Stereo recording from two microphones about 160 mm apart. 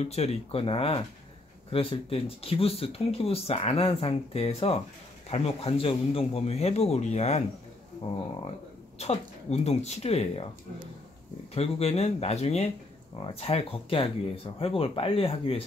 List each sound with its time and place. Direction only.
0.0 s speech: 40° left (ahead or behind)
8.9 s speech: 40° left (ahead or behind)
11.5 s speech: 40° left (ahead or behind)